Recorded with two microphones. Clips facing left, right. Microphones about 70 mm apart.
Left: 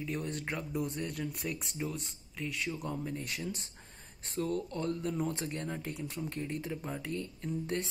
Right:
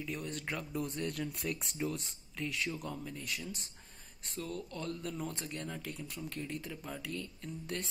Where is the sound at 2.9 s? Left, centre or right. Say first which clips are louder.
Left 5 dB; left.